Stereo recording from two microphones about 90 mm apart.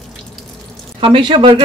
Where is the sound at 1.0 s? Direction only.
65° right (ahead or behind).